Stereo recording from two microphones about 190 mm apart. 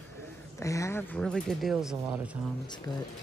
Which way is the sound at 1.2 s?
Centre (ahead or behind).